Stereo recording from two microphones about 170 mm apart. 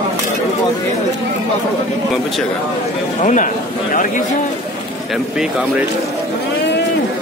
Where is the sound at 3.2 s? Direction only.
50° left (ahead or behind).